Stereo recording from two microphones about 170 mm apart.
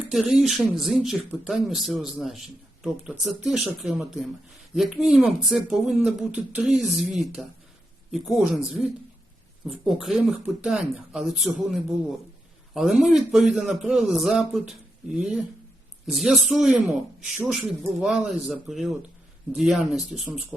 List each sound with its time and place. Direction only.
0.1 s speech: centre (ahead or behind)